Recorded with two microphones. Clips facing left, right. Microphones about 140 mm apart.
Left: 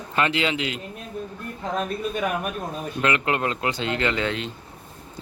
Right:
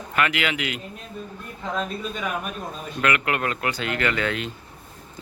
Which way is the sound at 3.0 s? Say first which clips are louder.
Even; 25° left (ahead or behind).